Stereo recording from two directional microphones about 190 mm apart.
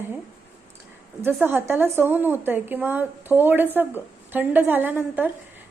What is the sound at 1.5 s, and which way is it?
Speech, 10° right (ahead or behind).